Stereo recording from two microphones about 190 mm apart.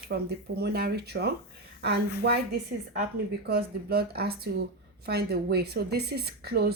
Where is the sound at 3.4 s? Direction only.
55° right (ahead or behind).